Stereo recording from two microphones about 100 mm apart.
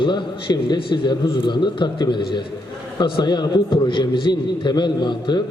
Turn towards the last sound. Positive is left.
turn(degrees=50)  # may be behind; listen again after turning